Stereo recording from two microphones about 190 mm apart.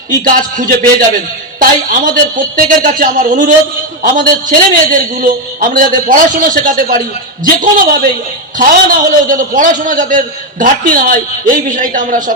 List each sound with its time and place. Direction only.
0.1 s a man's voice: 45° right (ahead or behind)